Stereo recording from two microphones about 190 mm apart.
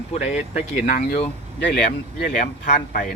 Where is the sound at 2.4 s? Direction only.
45° left (ahead or behind).